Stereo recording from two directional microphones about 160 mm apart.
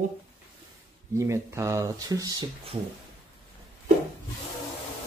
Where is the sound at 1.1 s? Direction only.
20° right (ahead or behind).